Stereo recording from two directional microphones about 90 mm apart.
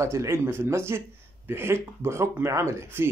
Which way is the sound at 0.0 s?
30° right (ahead or behind).